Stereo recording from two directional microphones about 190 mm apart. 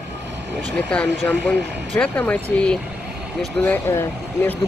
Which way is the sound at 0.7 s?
5° left (ahead or behind).